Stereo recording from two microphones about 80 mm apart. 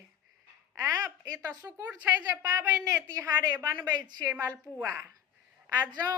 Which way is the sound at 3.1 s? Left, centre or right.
Right.